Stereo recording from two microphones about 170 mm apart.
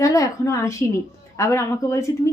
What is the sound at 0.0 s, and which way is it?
A woman's voice, 20° left (ahead or behind).